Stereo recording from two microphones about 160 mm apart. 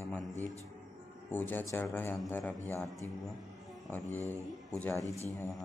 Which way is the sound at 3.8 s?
10° left (ahead or behind).